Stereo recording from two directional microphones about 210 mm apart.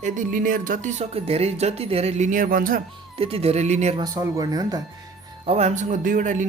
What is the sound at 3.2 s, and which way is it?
Speech, 25° right (ahead or behind).